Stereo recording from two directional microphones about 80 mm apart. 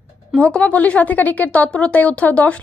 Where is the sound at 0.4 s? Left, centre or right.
Centre.